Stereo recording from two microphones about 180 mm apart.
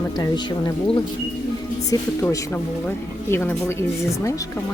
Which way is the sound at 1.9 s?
15° left (ahead or behind).